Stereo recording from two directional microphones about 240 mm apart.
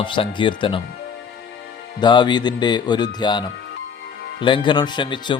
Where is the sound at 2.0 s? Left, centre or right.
Centre.